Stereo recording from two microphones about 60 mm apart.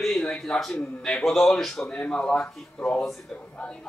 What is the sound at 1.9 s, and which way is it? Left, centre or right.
Speech, centre.